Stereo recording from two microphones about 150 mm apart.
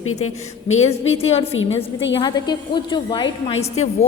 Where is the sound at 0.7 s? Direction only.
45° left (ahead or behind).